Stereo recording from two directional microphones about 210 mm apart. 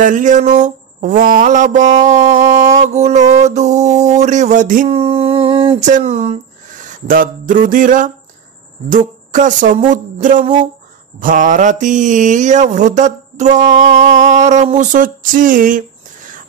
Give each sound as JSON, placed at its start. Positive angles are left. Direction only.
{"t": 0.0, "sound": "mantra", "side_deg": -35}
{"t": 4.9, "sound": "speech", "side_deg": -30}
{"t": 8.9, "sound": "mantra", "side_deg": -40}